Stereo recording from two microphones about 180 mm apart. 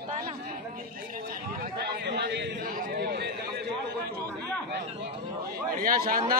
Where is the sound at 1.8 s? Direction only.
65° right (ahead or behind).